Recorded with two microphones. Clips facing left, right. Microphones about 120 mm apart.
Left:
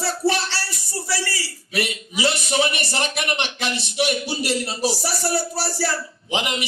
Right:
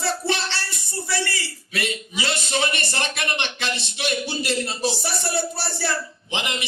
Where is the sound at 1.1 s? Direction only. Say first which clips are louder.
Even; 25° right (ahead or behind).